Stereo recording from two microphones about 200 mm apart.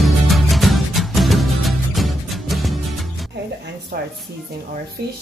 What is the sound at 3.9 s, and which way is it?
Music, 50° right (ahead or behind).